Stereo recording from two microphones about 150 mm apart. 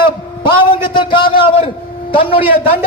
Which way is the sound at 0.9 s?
30° left (ahead or behind).